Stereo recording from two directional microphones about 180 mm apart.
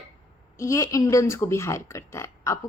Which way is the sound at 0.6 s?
15° left (ahead or behind).